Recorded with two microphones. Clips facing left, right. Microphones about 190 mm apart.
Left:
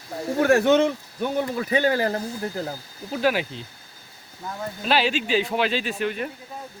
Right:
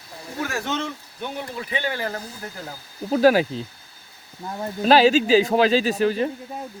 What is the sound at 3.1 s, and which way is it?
Speech, 40° right (ahead or behind).